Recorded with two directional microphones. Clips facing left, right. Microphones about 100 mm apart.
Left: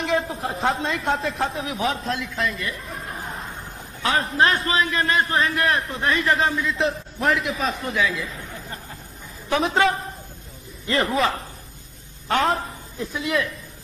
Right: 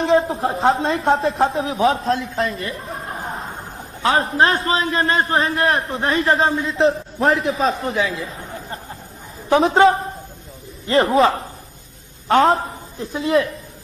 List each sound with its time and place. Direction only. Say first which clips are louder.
0.0 s a man's voice: right 7 dB; 30° right (ahead or behind)